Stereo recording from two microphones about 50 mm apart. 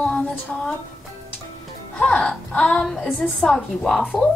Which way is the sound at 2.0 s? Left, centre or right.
Left.